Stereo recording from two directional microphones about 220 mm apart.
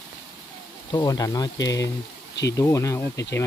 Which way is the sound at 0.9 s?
15° left (ahead or behind).